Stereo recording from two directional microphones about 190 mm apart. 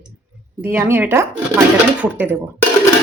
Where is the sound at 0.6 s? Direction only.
10° right (ahead or behind).